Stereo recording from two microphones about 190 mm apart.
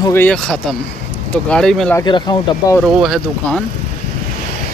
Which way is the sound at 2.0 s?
25° left (ahead or behind).